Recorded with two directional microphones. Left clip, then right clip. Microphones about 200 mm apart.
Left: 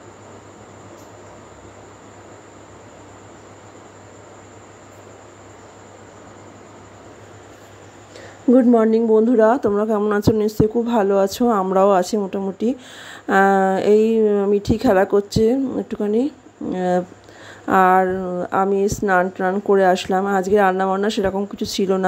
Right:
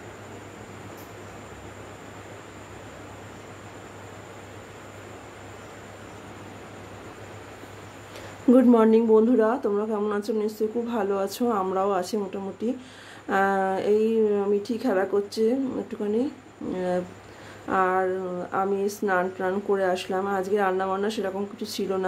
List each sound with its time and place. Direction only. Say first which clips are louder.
8.5 s speech: left 4 dB; 15° left (ahead or behind); by 22.0 s 40° left (ahead or behind)